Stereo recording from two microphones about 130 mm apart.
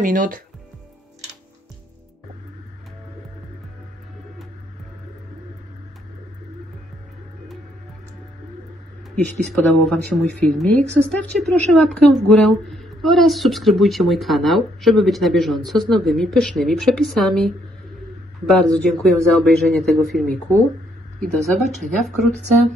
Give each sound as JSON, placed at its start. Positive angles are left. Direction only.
{"t": 0.0, "sound": "speech", "side_deg": -90}
{"t": 9.8, "sound": "speech", "side_deg": 5}